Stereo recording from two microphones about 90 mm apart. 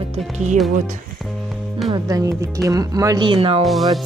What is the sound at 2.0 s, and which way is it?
Speech, 40° right (ahead or behind).